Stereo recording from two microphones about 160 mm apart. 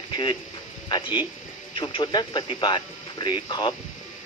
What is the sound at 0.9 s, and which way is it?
Speech, 30° left (ahead or behind).